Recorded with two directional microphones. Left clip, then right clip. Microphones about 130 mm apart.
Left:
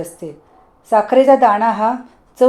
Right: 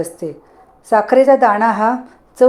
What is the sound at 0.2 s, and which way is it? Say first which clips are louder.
A woman's voice: right 5 dB; 35° right (ahead or behind).